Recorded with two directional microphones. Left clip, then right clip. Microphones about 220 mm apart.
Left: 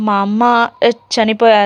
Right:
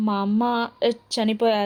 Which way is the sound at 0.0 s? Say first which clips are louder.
Left 11 dB; 20° left (ahead or behind).